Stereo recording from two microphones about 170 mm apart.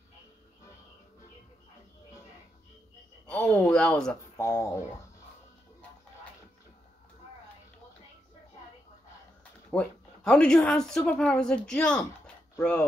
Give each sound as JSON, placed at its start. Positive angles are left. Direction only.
{"t": 3.3, "sound": "a woman's voice", "side_deg": 5}
{"t": 4.4, "sound": "speech", "side_deg": 20}
{"t": 9.7, "sound": "a woman's voice", "side_deg": 5}